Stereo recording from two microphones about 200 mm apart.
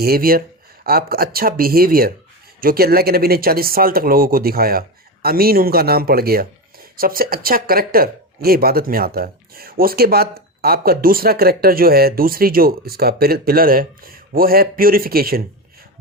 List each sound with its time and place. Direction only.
0.0 s speech: 45° right (ahead or behind)